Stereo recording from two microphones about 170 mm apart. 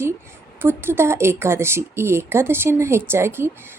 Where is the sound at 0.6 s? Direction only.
15° right (ahead or behind).